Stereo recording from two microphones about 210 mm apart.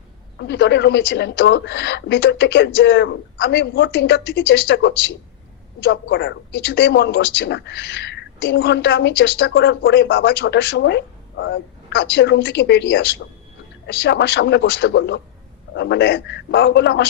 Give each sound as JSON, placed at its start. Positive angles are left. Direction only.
{"t": 0.3, "sound": "a man's voice", "side_deg": 55}